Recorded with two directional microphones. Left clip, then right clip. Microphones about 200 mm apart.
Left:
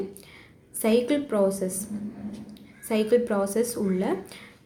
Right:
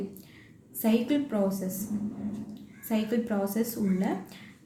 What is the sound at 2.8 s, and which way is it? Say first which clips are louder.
A woman's voice: left 8 dB; 30° left (ahead or behind).